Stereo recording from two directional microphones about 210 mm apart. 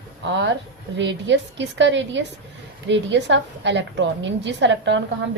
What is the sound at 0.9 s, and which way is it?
A woman's voice, 60° right (ahead or behind).